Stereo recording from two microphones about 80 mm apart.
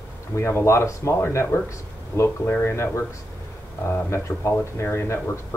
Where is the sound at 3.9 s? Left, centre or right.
Left.